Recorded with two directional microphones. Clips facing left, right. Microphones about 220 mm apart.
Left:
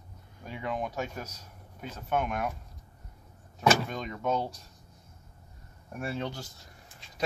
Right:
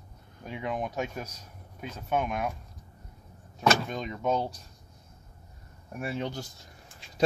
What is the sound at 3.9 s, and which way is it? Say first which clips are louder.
Speech: right 2 dB; 15° right (ahead or behind).